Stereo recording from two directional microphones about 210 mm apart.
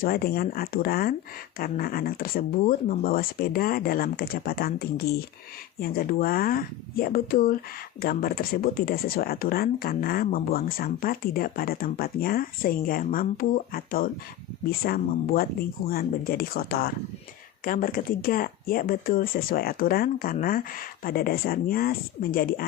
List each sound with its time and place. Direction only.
0.0 s speech: 45° left (ahead or behind)